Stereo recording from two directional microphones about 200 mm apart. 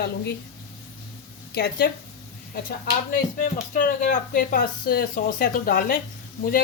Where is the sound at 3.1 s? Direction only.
40° left (ahead or behind).